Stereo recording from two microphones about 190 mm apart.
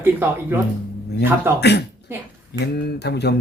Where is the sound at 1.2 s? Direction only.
60° left (ahead or behind).